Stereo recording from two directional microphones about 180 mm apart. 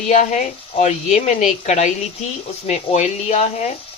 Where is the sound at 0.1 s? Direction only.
45° left (ahead or behind).